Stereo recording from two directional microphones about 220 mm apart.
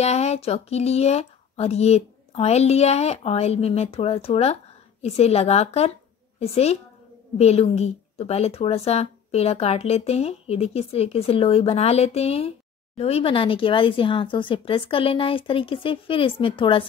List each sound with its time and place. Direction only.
0.0 s speech: 30° left (ahead or behind)